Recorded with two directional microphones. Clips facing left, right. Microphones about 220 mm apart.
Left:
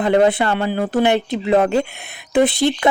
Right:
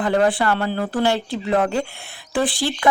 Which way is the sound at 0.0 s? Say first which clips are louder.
Left 4 dB; 20° left (ahead or behind).